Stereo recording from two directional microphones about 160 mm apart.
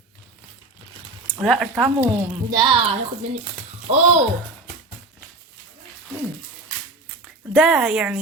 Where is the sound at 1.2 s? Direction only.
Centre (ahead or behind).